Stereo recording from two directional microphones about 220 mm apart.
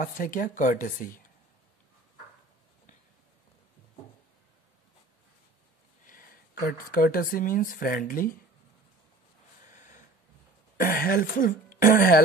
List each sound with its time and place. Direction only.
0.0 s speech: 40° left (ahead or behind)
6.0 s speech: 40° left (ahead or behind)
9.7 s a sound: 35° left (ahead or behind)
10.8 s speech: 40° left (ahead or behind)